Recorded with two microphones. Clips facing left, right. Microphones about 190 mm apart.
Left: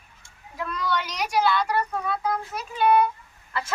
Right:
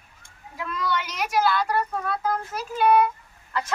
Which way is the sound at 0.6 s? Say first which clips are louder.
Even; centre (ahead or behind).